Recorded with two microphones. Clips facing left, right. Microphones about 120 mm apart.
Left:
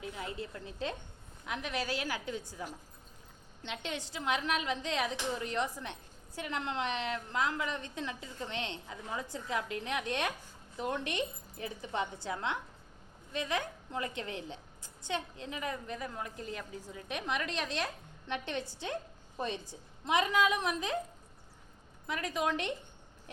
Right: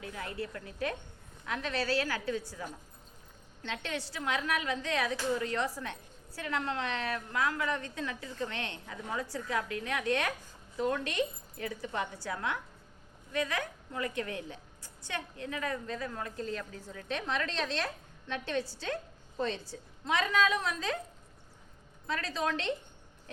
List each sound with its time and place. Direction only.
0.0 s a woman's voice: 20° left (ahead or behind)
22.0 s a woman's voice: 15° left (ahead or behind)